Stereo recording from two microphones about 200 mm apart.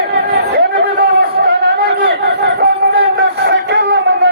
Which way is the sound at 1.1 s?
55° right (ahead or behind).